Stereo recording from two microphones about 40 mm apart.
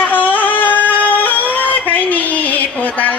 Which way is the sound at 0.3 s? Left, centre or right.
Left.